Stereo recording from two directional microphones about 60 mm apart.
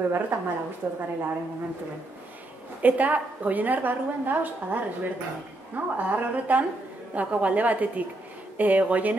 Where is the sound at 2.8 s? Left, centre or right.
Right.